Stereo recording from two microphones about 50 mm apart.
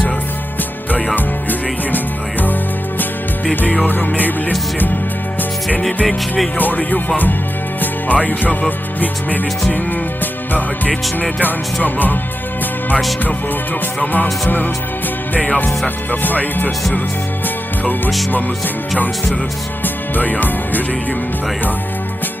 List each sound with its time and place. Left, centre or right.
3.5 s music: left
6.1 s music: centre
7.8 s music: left
11.2 s music: left
14.4 s music: left
16.2 s music: left
19.8 s music: left